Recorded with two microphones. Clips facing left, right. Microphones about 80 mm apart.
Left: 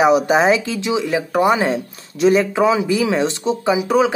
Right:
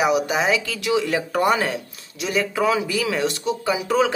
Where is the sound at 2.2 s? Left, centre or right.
Left.